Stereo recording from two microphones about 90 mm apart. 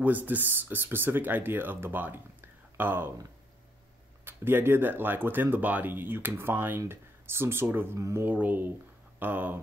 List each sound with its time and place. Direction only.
0.0 s speech: 20° right (ahead or behind)
4.2 s speech: 25° right (ahead or behind)